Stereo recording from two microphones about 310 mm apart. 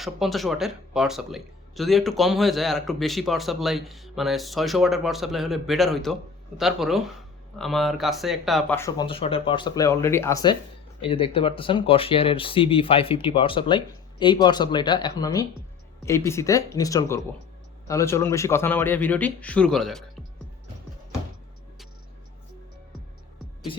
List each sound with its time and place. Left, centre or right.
0.0 s speech: centre